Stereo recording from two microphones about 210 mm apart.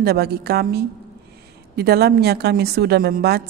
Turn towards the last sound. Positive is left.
turn(degrees=-50)  # may be behind; listen again after turning